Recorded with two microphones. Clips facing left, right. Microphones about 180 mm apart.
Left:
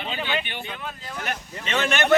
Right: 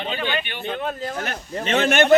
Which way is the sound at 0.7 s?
45° right (ahead or behind).